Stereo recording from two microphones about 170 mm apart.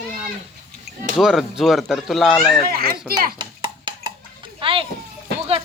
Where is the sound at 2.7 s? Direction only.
65° right (ahead or behind).